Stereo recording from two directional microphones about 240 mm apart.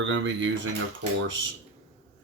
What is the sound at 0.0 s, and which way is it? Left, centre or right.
Speech, right.